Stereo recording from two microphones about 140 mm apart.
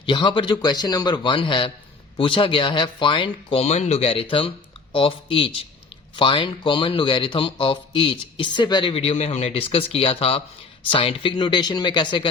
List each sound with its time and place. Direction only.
0.0 s speech: 35° left (ahead or behind)
3.6 s speech: 50° left (ahead or behind); by 12.3 s 35° left (ahead or behind)